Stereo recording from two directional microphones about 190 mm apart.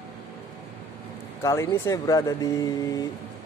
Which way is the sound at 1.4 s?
15° left (ahead or behind).